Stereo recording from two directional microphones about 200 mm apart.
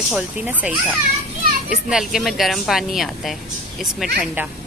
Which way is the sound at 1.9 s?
Centre (ahead or behind).